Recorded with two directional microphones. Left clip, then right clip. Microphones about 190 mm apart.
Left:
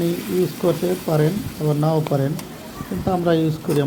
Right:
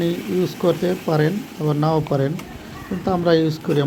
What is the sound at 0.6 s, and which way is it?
Speech, 15° right (ahead or behind).